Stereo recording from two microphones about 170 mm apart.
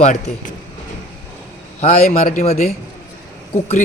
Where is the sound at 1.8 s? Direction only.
40° left (ahead or behind).